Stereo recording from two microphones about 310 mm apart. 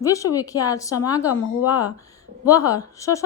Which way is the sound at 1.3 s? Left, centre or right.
Left.